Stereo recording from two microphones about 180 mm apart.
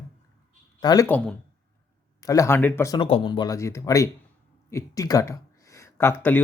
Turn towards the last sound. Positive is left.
turn(degrees=10)  # may be behind; listen again after turning